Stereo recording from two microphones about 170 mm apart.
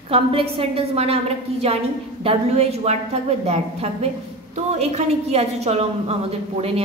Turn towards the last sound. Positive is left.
turn(degrees=-35)  # may be behind; listen again after turning